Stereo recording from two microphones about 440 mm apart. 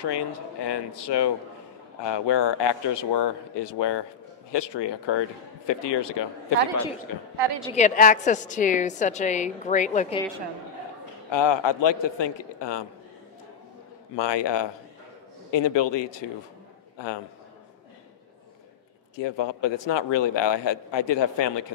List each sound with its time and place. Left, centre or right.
0.0 s a man's voice: left
7.7 s a woman's voice: centre
11.3 s a man's voice: left
14.1 s a man's voice: left
19.1 s a man's voice: left